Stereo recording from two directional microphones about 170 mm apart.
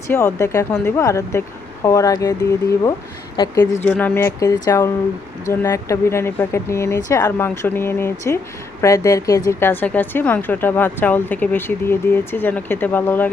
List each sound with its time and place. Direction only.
0.1 s speech: 15° left (ahead or behind)
3.3 s a woman's voice: 20° left (ahead or behind)